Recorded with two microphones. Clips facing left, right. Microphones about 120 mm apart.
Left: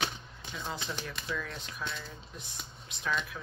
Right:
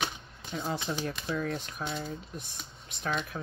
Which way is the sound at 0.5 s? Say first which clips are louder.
Right 5 dB; 45° right (ahead or behind).